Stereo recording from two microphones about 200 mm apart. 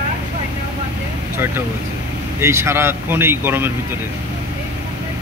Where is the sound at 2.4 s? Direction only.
15° right (ahead or behind).